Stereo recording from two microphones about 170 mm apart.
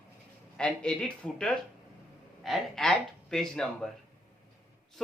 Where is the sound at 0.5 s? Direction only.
5° left (ahead or behind).